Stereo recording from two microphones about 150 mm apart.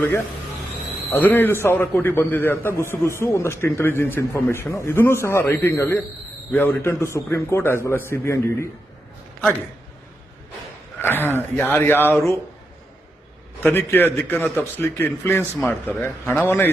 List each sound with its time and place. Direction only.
1.1 s a man's voice: 15° left (ahead or behind)
11.0 s a man's voice: 15° left (ahead or behind)
13.7 s a man's voice: 15° left (ahead or behind)